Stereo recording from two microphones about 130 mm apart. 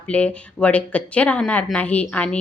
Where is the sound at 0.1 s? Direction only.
10° left (ahead or behind).